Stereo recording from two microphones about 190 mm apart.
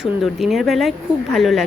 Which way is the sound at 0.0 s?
Centre (ahead or behind).